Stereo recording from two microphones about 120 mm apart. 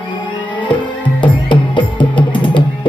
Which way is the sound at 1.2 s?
40° left (ahead or behind).